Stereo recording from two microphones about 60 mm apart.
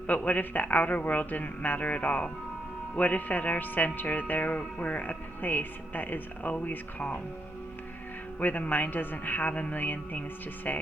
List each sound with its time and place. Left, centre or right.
0.1 s music: left
8.4 s music: left